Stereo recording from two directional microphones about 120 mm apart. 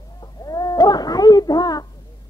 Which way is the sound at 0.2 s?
35° left (ahead or behind).